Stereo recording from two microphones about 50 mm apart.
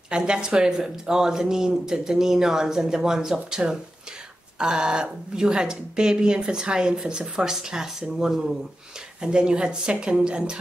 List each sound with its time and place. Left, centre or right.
0.1 s a woman's voice: centre